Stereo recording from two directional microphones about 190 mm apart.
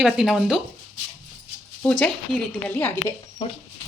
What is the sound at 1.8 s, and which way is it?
A woman's voice, 5° left (ahead or behind).